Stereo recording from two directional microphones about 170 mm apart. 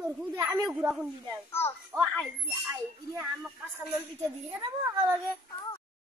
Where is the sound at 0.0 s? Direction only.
15° right (ahead or behind).